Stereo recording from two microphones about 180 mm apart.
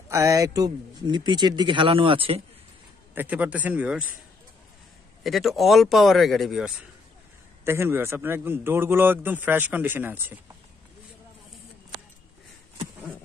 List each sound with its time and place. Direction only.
0.1 s speech: 15° right (ahead or behind)
3.2 s a man's voice: 10° right (ahead or behind)
5.2 s speech: centre (ahead or behind)
7.6 s a man's voice: 15° right (ahead or behind)